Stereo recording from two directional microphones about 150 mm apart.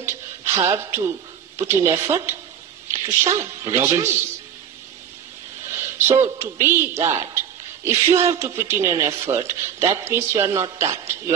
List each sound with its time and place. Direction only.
0.0 s a sound: 15° right (ahead or behind)
1.6 s a woman's voice: 15° right (ahead or behind)
5.7 s a woman's voice: 15° right (ahead or behind)